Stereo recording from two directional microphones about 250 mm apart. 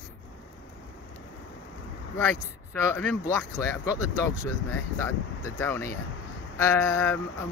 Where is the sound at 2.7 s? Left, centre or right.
Centre.